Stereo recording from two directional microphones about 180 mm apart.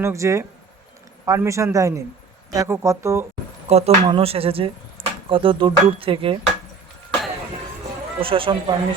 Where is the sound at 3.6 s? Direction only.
35° right (ahead or behind).